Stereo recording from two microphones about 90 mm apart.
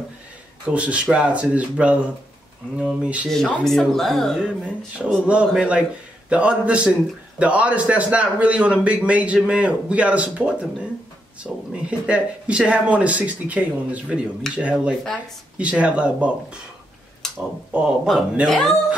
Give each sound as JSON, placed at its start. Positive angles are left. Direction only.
{"t": 0.7, "sound": "a man's voice", "side_deg": -15}
{"t": 3.6, "sound": "speech", "side_deg": 5}
{"t": 4.4, "sound": "a man's voice", "side_deg": -15}
{"t": 17.2, "sound": "a sound", "side_deg": 5}
{"t": 17.7, "sound": "speech", "side_deg": -5}
{"t": 18.5, "sound": "speech", "side_deg": 5}